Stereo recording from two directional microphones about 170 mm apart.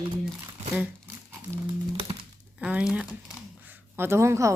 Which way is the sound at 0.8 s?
15° right (ahead or behind).